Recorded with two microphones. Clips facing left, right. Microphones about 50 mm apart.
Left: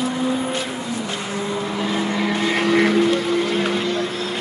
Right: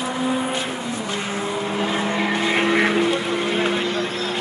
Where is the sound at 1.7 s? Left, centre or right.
Right.